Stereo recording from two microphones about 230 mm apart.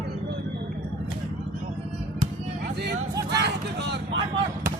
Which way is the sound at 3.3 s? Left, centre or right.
Right.